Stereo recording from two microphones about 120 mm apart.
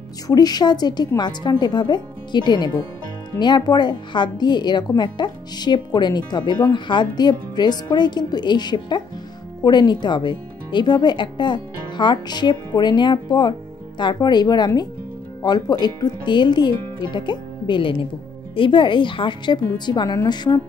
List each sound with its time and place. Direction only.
0.3 s a woman's voice: 35° left (ahead or behind)